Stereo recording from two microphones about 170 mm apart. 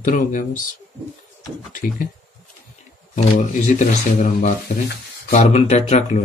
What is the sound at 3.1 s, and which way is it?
Speech, 45° left (ahead or behind).